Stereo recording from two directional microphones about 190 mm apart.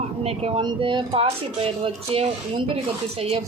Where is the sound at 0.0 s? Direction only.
35° right (ahead or behind).